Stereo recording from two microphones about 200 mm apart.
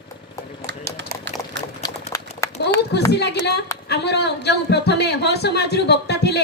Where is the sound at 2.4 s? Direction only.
15° left (ahead or behind).